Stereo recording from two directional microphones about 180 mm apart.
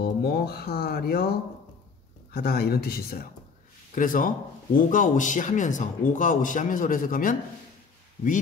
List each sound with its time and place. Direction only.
0.0 s speech: 60° left (ahead or behind)
2.3 s speech: 60° left (ahead or behind)
3.9 s a man's voice: 50° left (ahead or behind)